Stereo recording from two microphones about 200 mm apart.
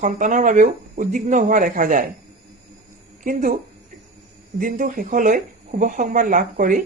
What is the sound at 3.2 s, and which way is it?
Speech, 40° right (ahead or behind).